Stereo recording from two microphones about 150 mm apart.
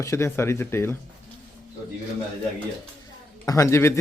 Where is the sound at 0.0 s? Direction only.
20° left (ahead or behind).